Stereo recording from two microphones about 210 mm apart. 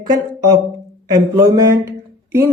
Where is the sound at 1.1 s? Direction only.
15° right (ahead or behind).